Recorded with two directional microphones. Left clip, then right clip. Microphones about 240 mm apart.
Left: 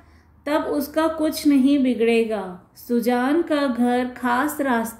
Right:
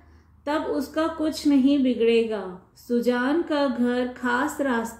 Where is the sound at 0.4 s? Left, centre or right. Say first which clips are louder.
Left 3 dB; left.